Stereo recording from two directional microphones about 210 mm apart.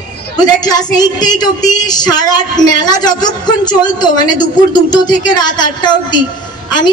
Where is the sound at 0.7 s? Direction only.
20° left (ahead or behind).